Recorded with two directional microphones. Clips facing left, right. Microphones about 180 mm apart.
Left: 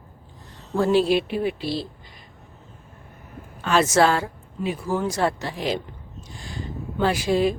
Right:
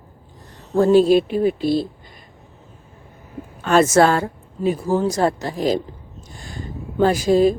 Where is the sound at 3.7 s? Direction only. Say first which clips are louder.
Right 4 dB; 50° right (ahead or behind).